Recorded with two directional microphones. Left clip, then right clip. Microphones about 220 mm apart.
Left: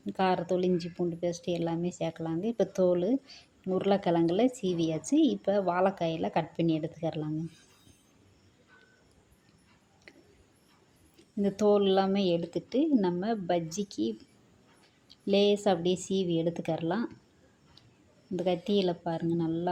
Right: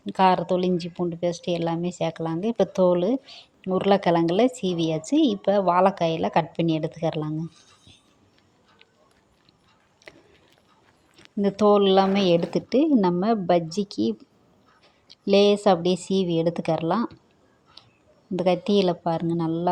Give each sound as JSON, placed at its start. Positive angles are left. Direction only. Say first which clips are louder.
{"t": 0.0, "sound": "a woman's voice", "louder": "right 9 dB", "side_deg": -5}
{"t": 10.1, "sound": "a sound", "louder": "right 8 dB", "side_deg": -10}
{"t": 11.4, "sound": "a woman's voice", "louder": "right 7 dB", "side_deg": -10}
{"t": 18.3, "sound": "a woman's voice", "louder": "right 7 dB", "side_deg": -15}